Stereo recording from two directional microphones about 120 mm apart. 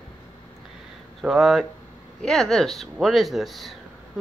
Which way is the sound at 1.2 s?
5° right (ahead or behind).